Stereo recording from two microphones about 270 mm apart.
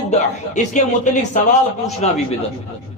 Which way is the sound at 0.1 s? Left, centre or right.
Left.